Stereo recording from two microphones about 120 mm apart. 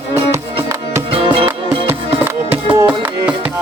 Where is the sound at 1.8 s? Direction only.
15° right (ahead or behind).